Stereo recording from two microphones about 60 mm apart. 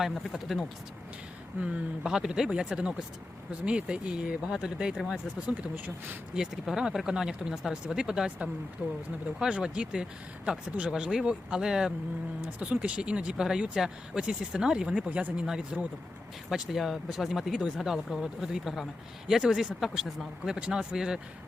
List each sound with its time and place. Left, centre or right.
0.0 s speech: centre
1.6 s speech: centre
5.7 s speech: right
6.3 s speech: centre
8.8 s speech: right
9.4 s speech: centre
12.5 s speech: right